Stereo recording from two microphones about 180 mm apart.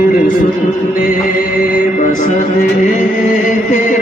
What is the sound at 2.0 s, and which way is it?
Music, 45° left (ahead or behind).